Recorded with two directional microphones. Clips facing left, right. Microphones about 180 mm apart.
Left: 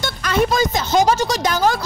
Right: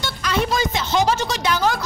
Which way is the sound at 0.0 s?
50° left (ahead or behind).